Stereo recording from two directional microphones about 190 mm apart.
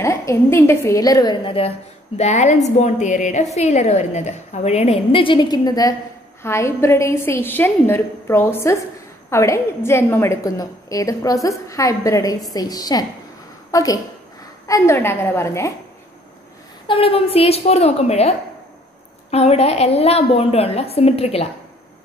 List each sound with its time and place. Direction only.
0.0 s a woman's voice: 15° left (ahead or behind)
16.8 s a woman's voice: 30° left (ahead or behind)
19.3 s a woman's voice: 35° left (ahead or behind)